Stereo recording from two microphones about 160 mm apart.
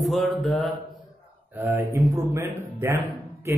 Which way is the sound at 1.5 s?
15° right (ahead or behind).